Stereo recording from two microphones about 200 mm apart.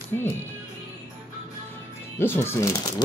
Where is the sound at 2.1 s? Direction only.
10° left (ahead or behind).